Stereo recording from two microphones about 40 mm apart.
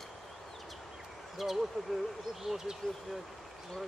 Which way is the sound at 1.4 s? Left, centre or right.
Centre.